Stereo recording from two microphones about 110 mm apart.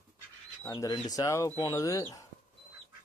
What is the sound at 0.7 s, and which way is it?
Speech, 35° left (ahead or behind).